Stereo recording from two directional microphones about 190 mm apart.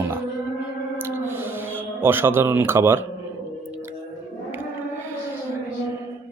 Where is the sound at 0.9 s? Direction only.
10° right (ahead or behind).